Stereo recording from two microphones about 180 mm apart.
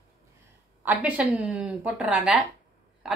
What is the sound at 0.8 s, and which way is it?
A woman's voice, 5° right (ahead or behind).